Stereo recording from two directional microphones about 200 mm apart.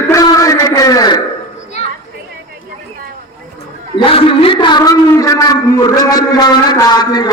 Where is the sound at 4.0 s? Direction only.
25° left (ahead or behind).